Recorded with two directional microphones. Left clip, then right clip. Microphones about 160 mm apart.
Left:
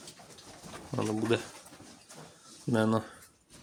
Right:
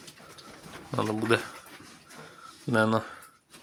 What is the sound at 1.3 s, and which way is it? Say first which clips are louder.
Speech: right 5 dB; 5° left (ahead or behind).